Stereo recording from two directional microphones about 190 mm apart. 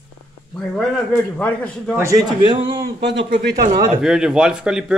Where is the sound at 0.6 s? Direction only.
5° left (ahead or behind).